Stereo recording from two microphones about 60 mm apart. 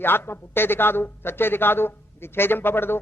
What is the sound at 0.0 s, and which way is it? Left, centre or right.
A man's voice, left.